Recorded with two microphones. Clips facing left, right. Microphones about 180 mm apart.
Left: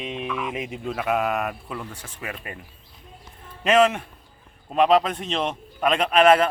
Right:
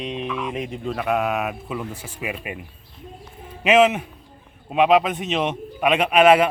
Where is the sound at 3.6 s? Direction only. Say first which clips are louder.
Right 2 dB; 5° right (ahead or behind).